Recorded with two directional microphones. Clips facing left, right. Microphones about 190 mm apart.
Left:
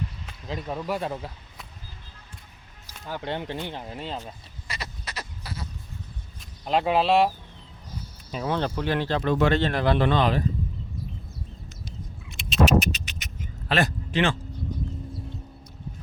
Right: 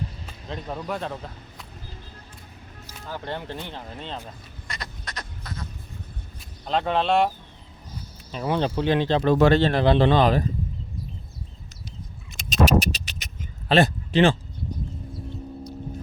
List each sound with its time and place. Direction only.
0.4 s speech: 5° left (ahead or behind)
2.8 s speech: 15° left (ahead or behind)
4.7 s a sound: 5° left (ahead or behind)
6.7 s speech: 10° left (ahead or behind)
8.4 s speech: 15° right (ahead or behind); by 10.4 s 40° right (ahead or behind)
12.3 s vehicle: 45° right (ahead or behind)